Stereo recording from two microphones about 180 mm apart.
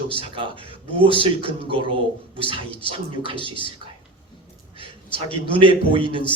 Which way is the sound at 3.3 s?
25° left (ahead or behind).